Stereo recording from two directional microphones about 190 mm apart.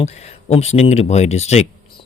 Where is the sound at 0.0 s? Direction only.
35° left (ahead or behind).